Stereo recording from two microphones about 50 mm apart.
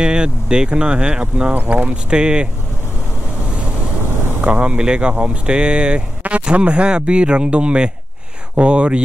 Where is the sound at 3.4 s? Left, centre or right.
Right.